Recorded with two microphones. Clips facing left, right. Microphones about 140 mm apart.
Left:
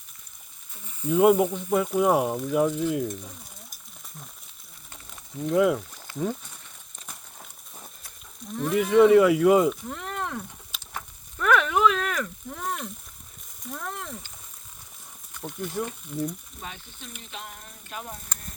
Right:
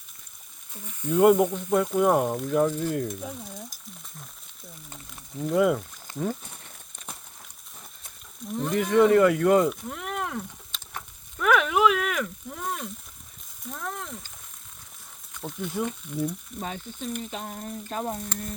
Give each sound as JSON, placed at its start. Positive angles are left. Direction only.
{"t": 1.0, "sound": "speech", "side_deg": 5}
{"t": 5.4, "sound": "speech", "side_deg": 0}
{"t": 8.6, "sound": "speech", "side_deg": 5}
{"t": 10.7, "sound": "a sound", "side_deg": 5}
{"t": 11.3, "sound": "frying", "side_deg": -5}
{"t": 13.7, "sound": "a sound", "side_deg": 0}
{"t": 15.4, "sound": "speech", "side_deg": -5}
{"t": 16.6, "sound": "speech", "side_deg": -45}
{"t": 17.2, "sound": "frying", "side_deg": -35}